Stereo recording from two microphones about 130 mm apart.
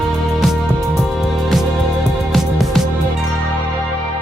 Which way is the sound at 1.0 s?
Centre (ahead or behind).